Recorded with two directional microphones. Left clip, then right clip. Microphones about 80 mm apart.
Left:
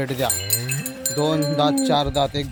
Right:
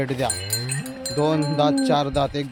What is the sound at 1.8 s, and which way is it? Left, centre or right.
Wind chime, centre.